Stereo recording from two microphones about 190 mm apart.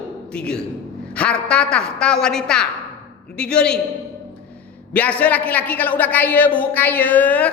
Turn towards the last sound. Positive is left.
turn(degrees=10)  # may be behind; listen again after turning